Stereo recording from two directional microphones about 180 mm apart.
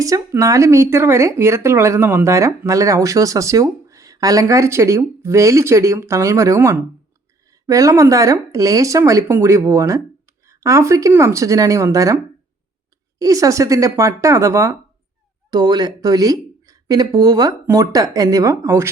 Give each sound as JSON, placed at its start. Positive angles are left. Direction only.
{"t": 0.0, "sound": "a woman's voice", "side_deg": -20}